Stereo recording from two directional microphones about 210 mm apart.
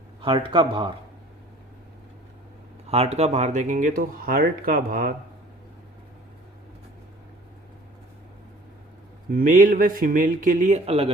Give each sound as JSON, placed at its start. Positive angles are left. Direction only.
{"t": 0.2, "sound": "speech", "side_deg": -25}
{"t": 2.9, "sound": "speech", "side_deg": -30}
{"t": 9.3, "sound": "speech", "side_deg": -40}